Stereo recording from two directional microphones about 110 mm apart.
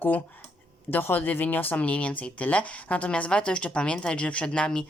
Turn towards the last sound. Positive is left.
turn(degrees=10)  # may be behind; listen again after turning